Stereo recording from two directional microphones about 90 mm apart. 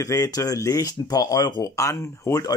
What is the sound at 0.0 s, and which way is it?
Speech, 40° left (ahead or behind).